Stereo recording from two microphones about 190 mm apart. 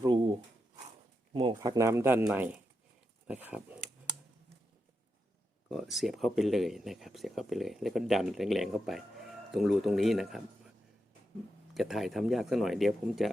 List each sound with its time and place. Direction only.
0.0 s a sound: 25° right (ahead or behind)
1.5 s speech: 20° right (ahead or behind)
5.7 s speech: centre (ahead or behind)
11.7 s speech: centre (ahead or behind)